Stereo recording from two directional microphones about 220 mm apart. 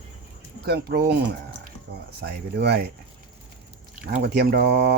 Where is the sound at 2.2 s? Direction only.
45° right (ahead or behind).